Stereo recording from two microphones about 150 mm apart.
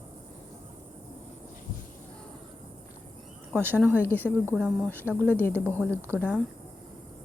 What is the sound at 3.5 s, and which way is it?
Speech, 15° right (ahead or behind).